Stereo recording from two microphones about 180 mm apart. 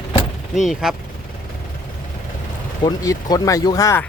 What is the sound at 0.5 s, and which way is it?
Speech, centre (ahead or behind).